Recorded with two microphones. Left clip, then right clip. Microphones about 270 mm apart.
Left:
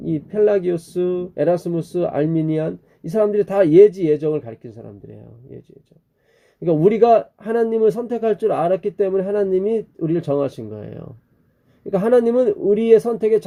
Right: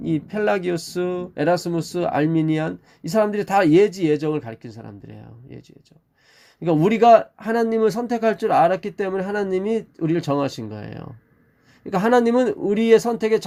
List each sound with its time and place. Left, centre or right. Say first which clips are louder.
0.0 s speech: left 4 dB; right
6.6 s speech: left 3 dB; right